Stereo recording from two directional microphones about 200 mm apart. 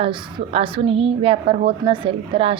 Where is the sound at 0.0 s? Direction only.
25° right (ahead or behind).